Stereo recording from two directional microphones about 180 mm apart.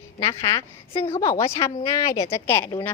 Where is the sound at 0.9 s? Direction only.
30° left (ahead or behind).